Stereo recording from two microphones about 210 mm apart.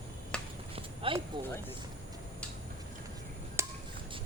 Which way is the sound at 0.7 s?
25° right (ahead or behind).